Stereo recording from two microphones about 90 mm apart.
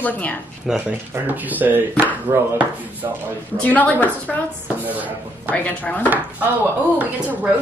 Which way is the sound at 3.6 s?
20° left (ahead or behind).